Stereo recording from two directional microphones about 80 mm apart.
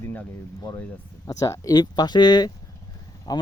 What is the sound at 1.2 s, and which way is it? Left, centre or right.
Speech, left.